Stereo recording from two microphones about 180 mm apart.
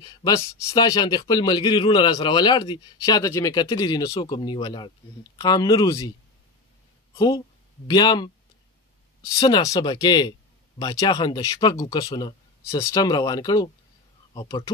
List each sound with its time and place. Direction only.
0.0 s a man's voice: 20° left (ahead or behind)
7.2 s a man's voice: 25° left (ahead or behind)